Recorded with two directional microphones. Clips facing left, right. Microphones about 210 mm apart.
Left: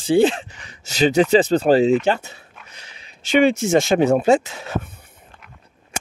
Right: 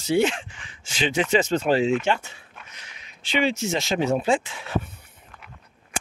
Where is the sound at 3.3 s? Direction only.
50° left (ahead or behind).